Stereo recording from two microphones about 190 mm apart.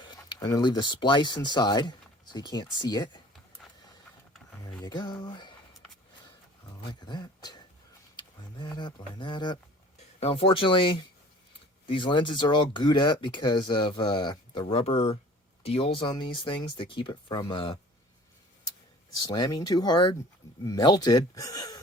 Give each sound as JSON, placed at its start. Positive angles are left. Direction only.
{"t": 0.0, "sound": "speech", "side_deg": 25}
{"t": 3.6, "sound": "a sound", "side_deg": 0}
{"t": 4.6, "sound": "speech", "side_deg": 20}
{"t": 7.0, "sound": "speech", "side_deg": 20}
{"t": 19.2, "sound": "speech", "side_deg": 20}